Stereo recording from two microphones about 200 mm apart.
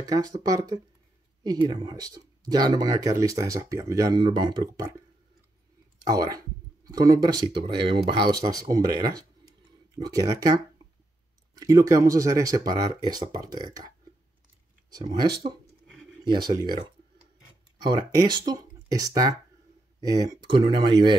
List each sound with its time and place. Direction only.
0.0 s speech: 20° right (ahead or behind)
6.0 s speech: 20° right (ahead or behind)
11.5 s speech: 15° right (ahead or behind)
16.3 s speech: 20° right (ahead or behind)
17.8 s speech: 20° right (ahead or behind)